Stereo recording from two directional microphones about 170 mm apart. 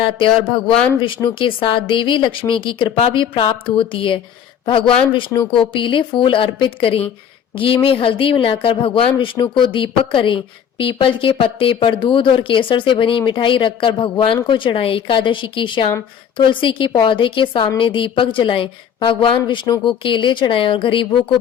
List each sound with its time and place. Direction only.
0.7 s speech: 5° left (ahead or behind)
0.9 s a woman's voice: 30° left (ahead or behind)